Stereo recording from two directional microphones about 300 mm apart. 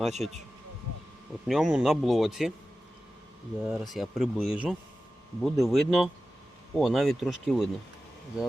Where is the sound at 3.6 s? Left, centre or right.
Centre.